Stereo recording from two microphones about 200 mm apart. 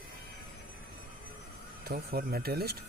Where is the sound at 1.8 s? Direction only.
50° right (ahead or behind).